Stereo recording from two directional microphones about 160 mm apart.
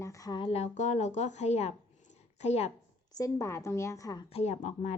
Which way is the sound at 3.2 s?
20° left (ahead or behind).